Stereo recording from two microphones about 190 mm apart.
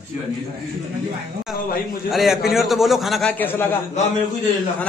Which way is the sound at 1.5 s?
Centre (ahead or behind).